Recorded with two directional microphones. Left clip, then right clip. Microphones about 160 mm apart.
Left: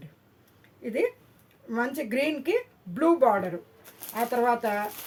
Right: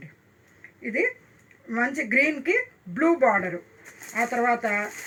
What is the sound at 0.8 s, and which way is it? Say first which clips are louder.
A woman's voice: right 2 dB; 25° left (ahead or behind).